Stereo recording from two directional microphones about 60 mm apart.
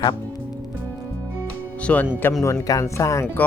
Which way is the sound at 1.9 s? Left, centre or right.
Left.